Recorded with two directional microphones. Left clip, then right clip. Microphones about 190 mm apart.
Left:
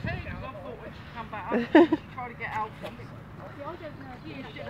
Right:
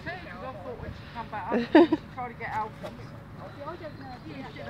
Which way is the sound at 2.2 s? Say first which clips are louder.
Even; 45° left (ahead or behind).